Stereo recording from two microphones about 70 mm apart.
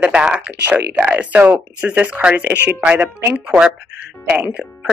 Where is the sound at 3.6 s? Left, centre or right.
Centre.